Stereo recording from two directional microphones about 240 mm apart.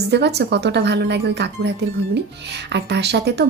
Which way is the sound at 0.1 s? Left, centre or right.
Right.